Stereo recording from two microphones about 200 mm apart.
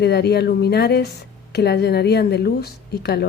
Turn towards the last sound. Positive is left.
turn(degrees=55)  # may be behind; listen again after turning